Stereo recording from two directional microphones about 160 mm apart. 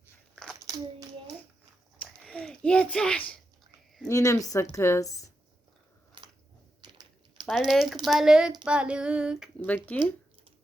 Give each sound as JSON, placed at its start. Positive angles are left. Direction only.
{"t": 2.0, "sound": "a sound", "side_deg": 5}
{"t": 4.1, "sound": "speech", "side_deg": 20}
{"t": 6.2, "sound": "biting", "side_deg": -30}
{"t": 6.8, "sound": "typing", "side_deg": -25}
{"t": 7.4, "sound": "a sound", "side_deg": 0}
{"t": 9.6, "sound": "speech", "side_deg": 10}